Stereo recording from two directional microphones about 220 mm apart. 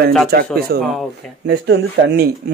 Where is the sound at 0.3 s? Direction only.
45° right (ahead or behind).